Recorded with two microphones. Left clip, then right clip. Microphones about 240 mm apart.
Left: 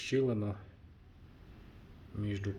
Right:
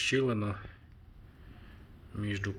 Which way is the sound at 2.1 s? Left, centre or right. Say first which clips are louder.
Right 3 dB; centre.